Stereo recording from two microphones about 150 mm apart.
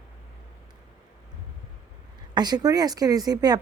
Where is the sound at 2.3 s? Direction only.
25° right (ahead or behind).